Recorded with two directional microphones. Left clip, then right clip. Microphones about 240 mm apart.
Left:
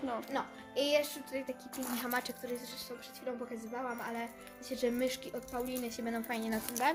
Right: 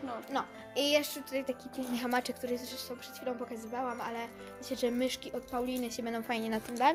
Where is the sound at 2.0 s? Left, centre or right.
Right.